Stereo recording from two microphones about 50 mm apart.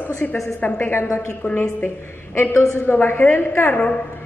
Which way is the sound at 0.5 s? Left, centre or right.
Left.